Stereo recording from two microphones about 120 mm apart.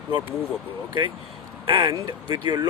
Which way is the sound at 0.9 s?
40° right (ahead or behind).